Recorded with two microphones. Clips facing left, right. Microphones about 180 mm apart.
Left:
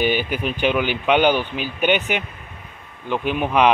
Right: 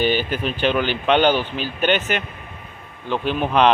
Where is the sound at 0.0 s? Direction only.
10° left (ahead or behind).